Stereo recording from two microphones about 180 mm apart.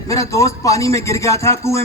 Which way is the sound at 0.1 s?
15° left (ahead or behind).